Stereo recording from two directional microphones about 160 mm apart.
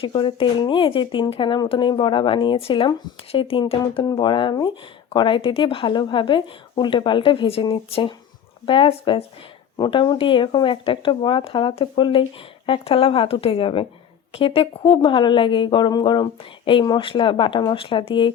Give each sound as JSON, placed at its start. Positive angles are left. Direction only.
{"t": 0.0, "sound": "speech", "side_deg": 35}
{"t": 3.8, "sound": "speech", "side_deg": 25}